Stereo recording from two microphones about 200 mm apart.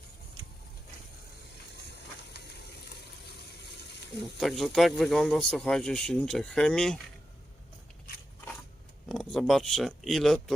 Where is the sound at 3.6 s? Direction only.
55° left (ahead or behind).